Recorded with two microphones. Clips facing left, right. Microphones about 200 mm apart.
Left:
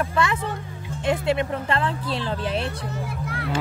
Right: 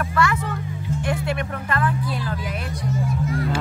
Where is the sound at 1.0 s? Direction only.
25° left (ahead or behind).